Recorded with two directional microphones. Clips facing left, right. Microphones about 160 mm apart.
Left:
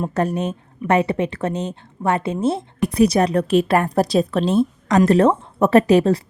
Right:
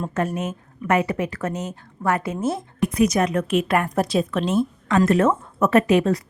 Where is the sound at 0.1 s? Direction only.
35° left (ahead or behind).